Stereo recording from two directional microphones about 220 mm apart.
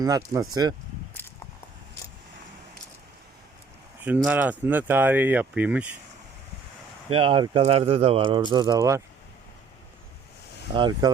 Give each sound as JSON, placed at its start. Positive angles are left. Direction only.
{"t": 0.0, "sound": "speech", "side_deg": -15}
{"t": 4.0, "sound": "speech", "side_deg": -5}
{"t": 7.1, "sound": "speech", "side_deg": -25}
{"t": 10.8, "sound": "speech", "side_deg": -20}